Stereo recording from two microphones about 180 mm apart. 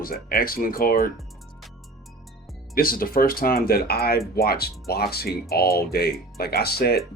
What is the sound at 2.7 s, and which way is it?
Speech, 55° left (ahead or behind).